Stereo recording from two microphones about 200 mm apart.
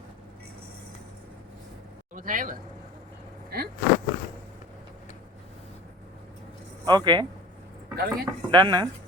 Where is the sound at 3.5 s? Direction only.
50° right (ahead or behind).